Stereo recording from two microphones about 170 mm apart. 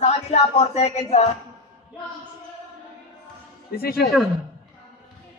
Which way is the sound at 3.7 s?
65° left (ahead or behind).